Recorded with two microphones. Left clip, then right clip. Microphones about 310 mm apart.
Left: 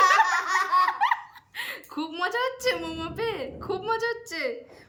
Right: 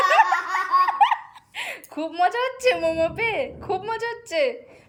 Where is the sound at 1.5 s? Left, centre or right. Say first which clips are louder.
Right 3 dB; centre.